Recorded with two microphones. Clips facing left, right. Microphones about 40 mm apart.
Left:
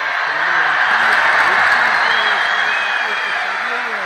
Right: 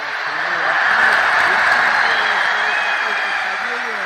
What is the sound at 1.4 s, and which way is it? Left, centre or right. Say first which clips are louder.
Applause: left 1 dB; left.